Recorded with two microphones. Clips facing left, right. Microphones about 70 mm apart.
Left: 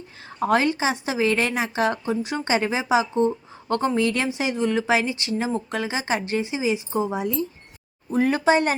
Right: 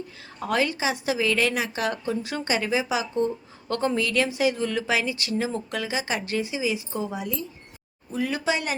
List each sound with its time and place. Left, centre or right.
0.3 s a woman's voice: left
8.1 s speech: left